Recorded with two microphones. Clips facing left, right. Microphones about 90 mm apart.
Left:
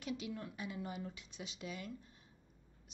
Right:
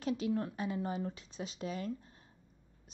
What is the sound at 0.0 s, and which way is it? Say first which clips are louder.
A woman's voice: right 9 dB; 40° right (ahead or behind).